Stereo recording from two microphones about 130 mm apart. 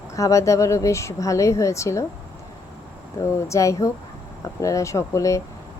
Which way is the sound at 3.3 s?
20° left (ahead or behind).